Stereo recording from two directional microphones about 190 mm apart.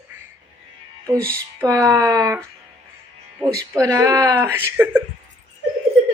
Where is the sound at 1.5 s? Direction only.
15° right (ahead or behind).